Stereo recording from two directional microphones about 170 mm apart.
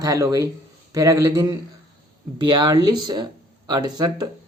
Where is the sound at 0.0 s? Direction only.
20° right (ahead or behind).